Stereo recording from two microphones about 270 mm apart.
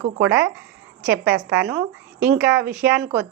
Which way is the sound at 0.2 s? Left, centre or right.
Centre.